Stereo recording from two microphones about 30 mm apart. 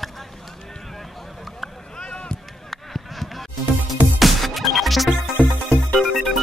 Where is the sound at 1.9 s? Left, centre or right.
Left.